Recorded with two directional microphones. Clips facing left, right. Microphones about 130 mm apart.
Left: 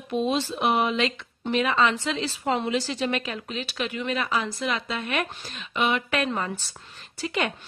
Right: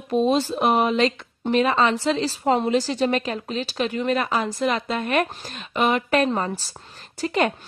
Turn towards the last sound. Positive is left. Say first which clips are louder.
# right 6 dB
turn(degrees=-40)  # may be behind; listen again after turning